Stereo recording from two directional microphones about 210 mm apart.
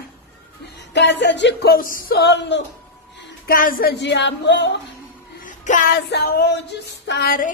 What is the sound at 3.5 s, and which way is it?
Speech, 40° left (ahead or behind).